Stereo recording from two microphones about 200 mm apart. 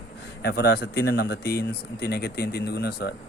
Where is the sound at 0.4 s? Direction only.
55° left (ahead or behind).